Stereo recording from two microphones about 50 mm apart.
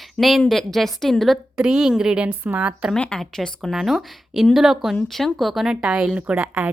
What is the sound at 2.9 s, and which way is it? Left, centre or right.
Speech, centre.